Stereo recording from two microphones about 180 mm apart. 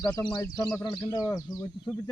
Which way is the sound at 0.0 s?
20° left (ahead or behind).